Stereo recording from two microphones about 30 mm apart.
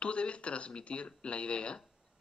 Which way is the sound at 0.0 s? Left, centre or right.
Left.